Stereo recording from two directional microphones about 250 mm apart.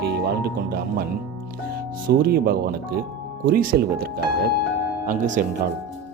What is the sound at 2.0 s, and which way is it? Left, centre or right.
Speech, right.